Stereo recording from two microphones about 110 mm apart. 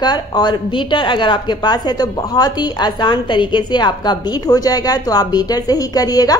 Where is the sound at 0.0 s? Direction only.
40° left (ahead or behind).